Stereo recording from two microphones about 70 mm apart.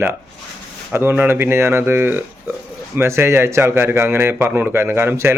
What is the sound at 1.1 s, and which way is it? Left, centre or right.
A man's voice, right.